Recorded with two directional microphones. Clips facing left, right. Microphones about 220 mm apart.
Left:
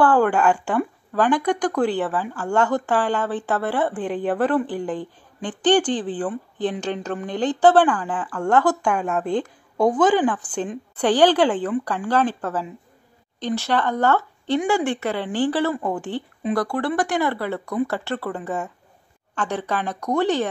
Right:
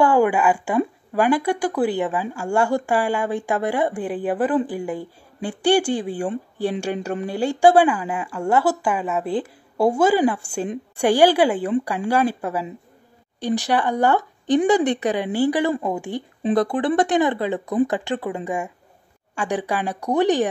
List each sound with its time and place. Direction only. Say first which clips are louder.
0.0 s speech: even; 10° right (ahead or behind)